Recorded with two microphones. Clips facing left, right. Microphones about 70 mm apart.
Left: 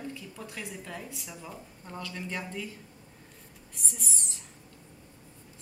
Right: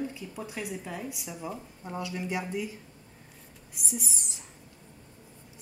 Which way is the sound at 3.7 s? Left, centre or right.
Centre.